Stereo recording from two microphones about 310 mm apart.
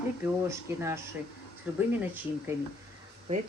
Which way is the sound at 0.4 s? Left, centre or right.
Centre.